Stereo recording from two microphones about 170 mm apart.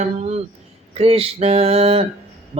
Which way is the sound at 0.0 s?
40° right (ahead or behind).